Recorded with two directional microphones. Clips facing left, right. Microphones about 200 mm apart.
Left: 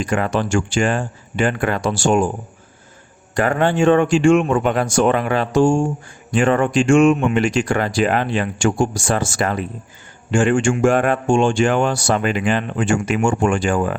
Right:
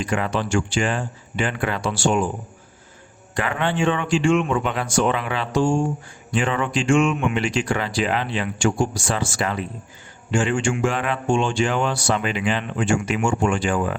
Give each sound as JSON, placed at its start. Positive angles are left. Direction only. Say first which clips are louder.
{"t": 0.0, "sound": "speech", "louder": "left 4 dB", "side_deg": 45}
{"t": 3.3, "sound": "speech", "louder": "left 6 dB", "side_deg": 45}